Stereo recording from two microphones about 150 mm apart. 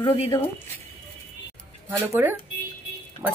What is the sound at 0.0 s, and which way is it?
Speech, 35° left (ahead or behind).